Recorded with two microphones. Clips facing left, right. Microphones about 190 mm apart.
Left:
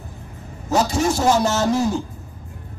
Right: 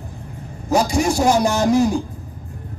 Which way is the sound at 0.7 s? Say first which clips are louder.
Right 2 dB; 15° right (ahead or behind).